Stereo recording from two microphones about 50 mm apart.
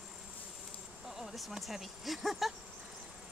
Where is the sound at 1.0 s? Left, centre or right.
Centre.